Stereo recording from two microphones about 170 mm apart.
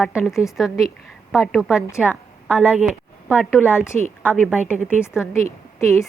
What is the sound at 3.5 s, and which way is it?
Speech, 10° left (ahead or behind).